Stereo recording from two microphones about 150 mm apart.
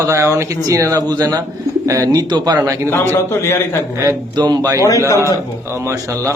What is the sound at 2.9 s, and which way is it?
Speech, 15° left (ahead or behind).